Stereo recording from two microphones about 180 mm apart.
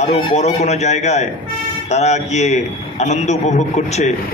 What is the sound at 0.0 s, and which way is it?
A man's voice, 40° left (ahead or behind).